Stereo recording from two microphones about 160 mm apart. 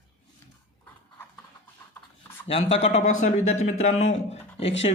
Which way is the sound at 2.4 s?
40° left (ahead or behind).